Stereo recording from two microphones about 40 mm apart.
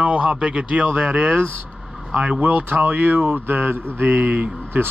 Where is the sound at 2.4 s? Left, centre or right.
Right.